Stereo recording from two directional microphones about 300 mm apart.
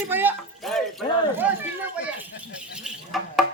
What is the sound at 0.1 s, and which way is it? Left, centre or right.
Speech, centre.